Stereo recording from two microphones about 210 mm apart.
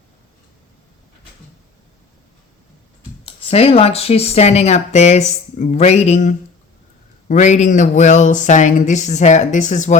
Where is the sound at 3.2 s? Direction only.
30° left (ahead or behind).